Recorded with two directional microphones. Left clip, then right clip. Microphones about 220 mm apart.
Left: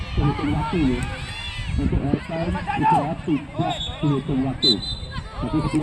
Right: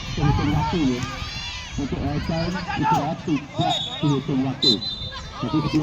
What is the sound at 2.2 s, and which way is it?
Speech, 20° right (ahead or behind).